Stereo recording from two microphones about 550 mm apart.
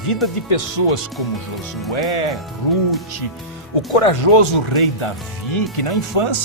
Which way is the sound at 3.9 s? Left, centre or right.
Left.